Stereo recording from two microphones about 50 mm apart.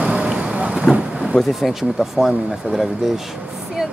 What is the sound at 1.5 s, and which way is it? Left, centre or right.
Speech, centre.